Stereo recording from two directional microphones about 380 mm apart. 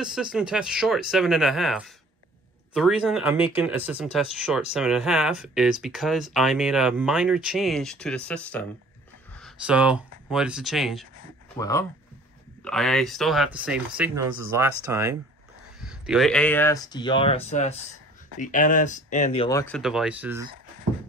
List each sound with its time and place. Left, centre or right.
0.0 s speech: centre
19.7 s speech: centre